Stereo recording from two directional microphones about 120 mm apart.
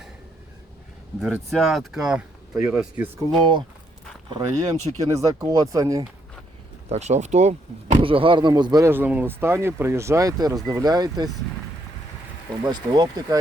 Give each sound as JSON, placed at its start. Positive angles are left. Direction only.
{"t": 1.2, "sound": "speech", "side_deg": 0}
{"t": 4.3, "sound": "speech", "side_deg": -30}
{"t": 6.9, "sound": "speech", "side_deg": -70}
{"t": 7.9, "sound": "speech", "side_deg": -50}
{"t": 8.8, "sound": "speech", "side_deg": -15}
{"t": 12.6, "sound": "speech", "side_deg": -35}